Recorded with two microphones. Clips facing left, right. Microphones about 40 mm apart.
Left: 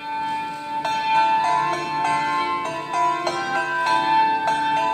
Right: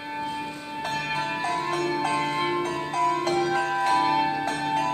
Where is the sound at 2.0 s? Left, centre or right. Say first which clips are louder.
Left 4 dB; left.